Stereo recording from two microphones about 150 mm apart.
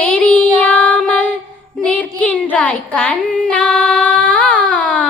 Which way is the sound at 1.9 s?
10° left (ahead or behind).